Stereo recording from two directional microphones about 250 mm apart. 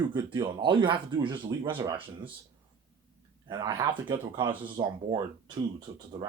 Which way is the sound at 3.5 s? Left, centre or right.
Centre.